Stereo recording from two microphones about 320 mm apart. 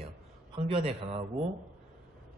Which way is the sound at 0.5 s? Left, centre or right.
Centre.